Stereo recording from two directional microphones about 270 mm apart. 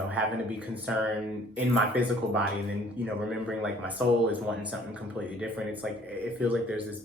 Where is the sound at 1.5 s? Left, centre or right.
Centre.